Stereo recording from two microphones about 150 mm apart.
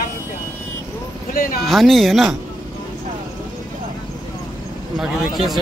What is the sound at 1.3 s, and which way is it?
Speech, 75° left (ahead or behind).